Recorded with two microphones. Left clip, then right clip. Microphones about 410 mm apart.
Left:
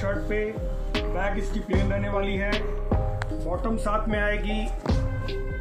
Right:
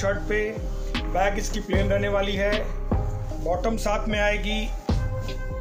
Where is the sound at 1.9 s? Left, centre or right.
Right.